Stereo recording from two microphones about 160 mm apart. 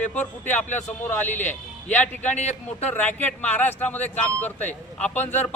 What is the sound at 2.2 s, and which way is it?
Speech, 45° left (ahead or behind).